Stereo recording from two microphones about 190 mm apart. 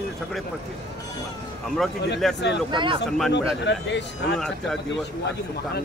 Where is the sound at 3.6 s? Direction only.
65° left (ahead or behind).